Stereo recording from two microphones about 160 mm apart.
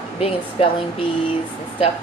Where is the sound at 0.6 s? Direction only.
35° left (ahead or behind).